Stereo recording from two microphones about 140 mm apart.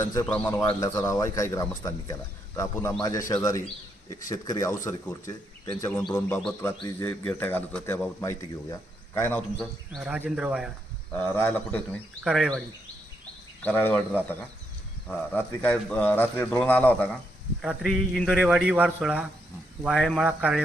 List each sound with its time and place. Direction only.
0.0 s speech: 20° left (ahead or behind)
9.9 s speech: 10° right (ahead or behind)
11.1 s speech: 15° left (ahead or behind)
12.2 s speech: centre (ahead or behind)
13.6 s speech: 10° left (ahead or behind)
17.6 s speech: centre (ahead or behind)